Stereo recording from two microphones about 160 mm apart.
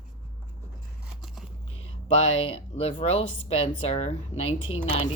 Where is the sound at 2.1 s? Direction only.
40° left (ahead or behind).